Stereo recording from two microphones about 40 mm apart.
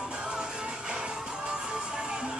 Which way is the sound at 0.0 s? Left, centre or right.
Right.